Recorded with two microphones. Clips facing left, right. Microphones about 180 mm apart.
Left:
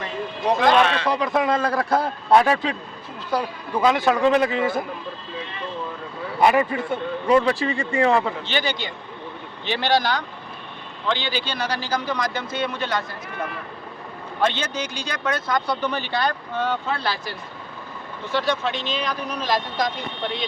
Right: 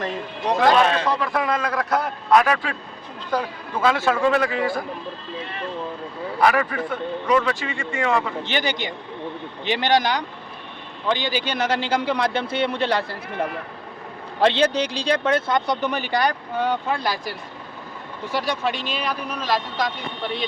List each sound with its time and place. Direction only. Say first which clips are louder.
0.7 s speech: right 1 dB; 40° right (ahead or behind)
1.0 s a man's voice: left 2 dB; 15° left (ahead or behind)
6.4 s a man's voice: left 2 dB; 25° left (ahead or behind)
8.4 s speech: right 1 dB; 15° right (ahead or behind)